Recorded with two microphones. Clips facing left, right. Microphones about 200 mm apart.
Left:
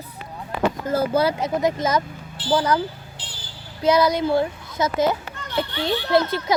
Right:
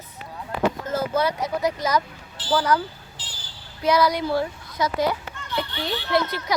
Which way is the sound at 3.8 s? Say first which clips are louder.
Left 3 dB; 25° left (ahead or behind).